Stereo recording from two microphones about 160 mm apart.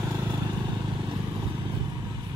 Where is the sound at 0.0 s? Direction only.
25° right (ahead or behind).